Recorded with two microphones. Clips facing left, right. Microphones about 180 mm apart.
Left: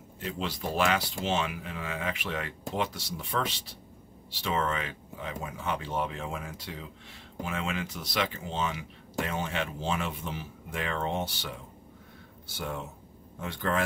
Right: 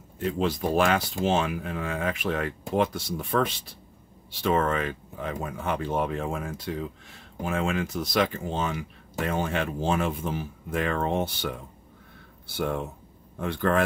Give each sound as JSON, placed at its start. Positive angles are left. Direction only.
{"t": 0.2, "sound": "speech", "side_deg": -50}